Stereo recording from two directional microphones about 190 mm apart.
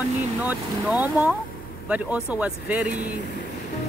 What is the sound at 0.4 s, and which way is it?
Speech, 10° right (ahead or behind).